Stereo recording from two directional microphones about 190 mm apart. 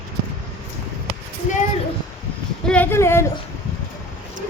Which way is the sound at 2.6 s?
10° left (ahead or behind).